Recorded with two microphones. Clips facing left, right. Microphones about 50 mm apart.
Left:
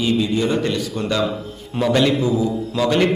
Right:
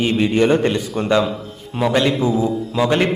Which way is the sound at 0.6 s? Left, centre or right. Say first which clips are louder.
Right 3 dB; right.